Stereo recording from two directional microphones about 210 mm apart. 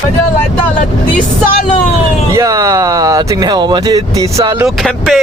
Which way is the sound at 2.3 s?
15° right (ahead or behind).